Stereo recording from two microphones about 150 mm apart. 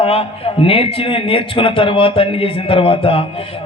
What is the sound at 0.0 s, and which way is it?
A man's voice, 40° left (ahead or behind).